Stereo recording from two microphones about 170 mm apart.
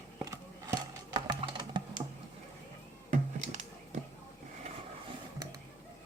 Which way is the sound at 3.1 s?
45° right (ahead or behind).